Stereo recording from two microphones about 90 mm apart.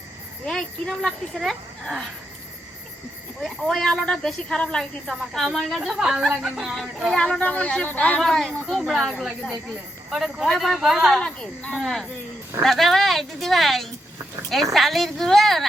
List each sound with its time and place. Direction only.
0.4 s speech: centre (ahead or behind)
3.4 s speech: centre (ahead or behind)
7.2 s speech: 10° left (ahead or behind)
8.2 s speech: centre (ahead or behind)
11.2 s speech: 15° left (ahead or behind)
11.8 s speech: centre (ahead or behind)